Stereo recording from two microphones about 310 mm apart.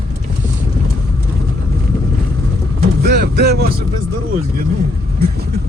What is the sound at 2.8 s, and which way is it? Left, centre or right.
Vehicle, right.